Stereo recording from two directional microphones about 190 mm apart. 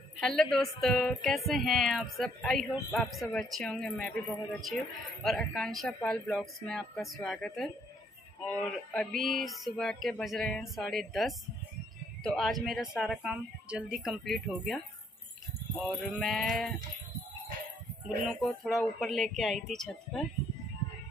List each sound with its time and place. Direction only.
0.2 s speech: 5° left (ahead or behind)
15.8 s speech: centre (ahead or behind)
18.0 s speech: centre (ahead or behind)